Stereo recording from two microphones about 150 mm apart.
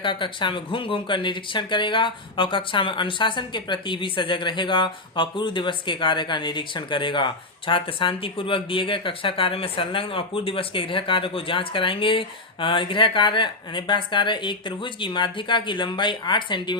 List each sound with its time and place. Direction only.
0.0 s speech: 35° left (ahead or behind)